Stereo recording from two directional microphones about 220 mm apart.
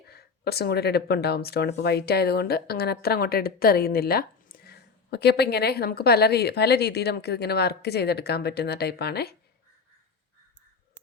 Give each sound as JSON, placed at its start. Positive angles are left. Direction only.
{"t": 0.1, "sound": "speech", "side_deg": 45}